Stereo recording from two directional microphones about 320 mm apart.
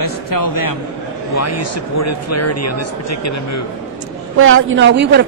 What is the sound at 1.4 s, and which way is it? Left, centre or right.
Speech, left.